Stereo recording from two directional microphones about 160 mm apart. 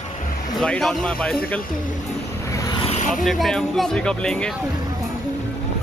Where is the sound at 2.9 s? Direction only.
55° left (ahead or behind).